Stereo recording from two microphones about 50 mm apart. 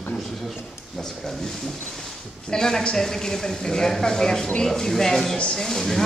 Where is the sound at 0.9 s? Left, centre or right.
Centre.